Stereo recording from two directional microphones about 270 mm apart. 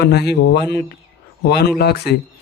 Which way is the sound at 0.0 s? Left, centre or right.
Left.